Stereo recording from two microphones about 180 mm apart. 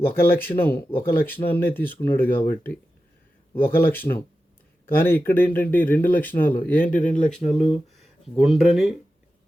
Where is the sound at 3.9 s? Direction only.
10° left (ahead or behind).